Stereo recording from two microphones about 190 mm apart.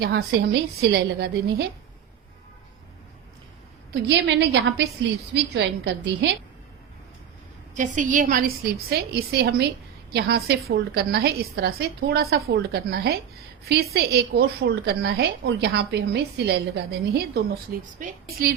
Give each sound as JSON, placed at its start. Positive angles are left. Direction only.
{"t": 0.0, "sound": "a woman's voice", "side_deg": -55}
{"t": 4.0, "sound": "a woman's voice", "side_deg": -65}
{"t": 7.8, "sound": "a woman's voice", "side_deg": -40}